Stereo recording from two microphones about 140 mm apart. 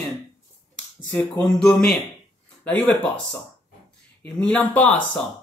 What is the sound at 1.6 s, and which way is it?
Speech, 5° left (ahead or behind).